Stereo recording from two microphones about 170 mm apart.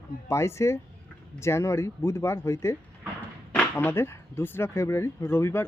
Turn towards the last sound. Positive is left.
turn(degrees=15)  # may be behind; listen again after turning